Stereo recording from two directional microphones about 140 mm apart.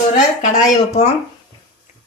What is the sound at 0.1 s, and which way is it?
Speech, 55° left (ahead or behind).